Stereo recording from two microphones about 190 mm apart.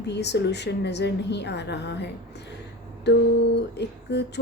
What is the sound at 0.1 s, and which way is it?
Speech, 65° left (ahead or behind).